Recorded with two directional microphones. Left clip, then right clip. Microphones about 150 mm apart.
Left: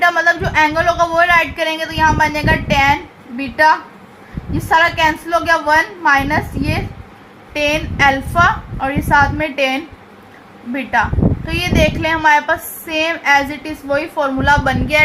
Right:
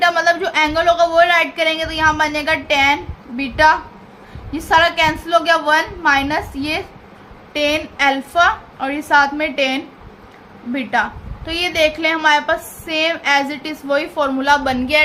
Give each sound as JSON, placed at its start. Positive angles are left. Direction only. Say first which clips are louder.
{"t": 0.0, "sound": "a woman's voice", "louder": "left 1 dB", "side_deg": -45}